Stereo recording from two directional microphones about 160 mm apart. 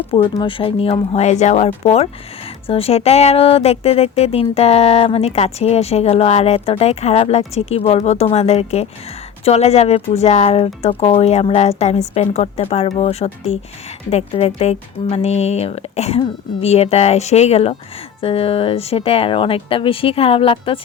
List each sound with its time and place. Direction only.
0.3 s a woman's voice: 35° left (ahead or behind)